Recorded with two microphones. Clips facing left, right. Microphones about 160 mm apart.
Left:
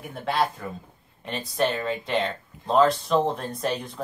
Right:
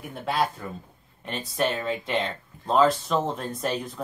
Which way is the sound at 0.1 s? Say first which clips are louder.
Left 1 dB; centre (ahead or behind).